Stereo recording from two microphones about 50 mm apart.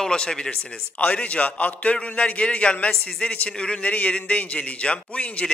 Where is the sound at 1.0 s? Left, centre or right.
Left.